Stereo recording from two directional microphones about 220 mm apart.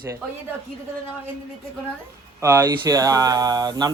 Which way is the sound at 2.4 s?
15° right (ahead or behind).